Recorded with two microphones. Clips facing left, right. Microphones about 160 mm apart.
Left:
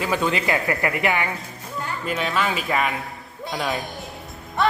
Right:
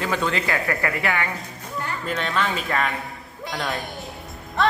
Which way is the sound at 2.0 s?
5° left (ahead or behind).